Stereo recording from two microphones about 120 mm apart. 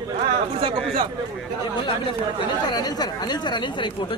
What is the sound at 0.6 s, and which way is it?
Speech, 50° right (ahead or behind).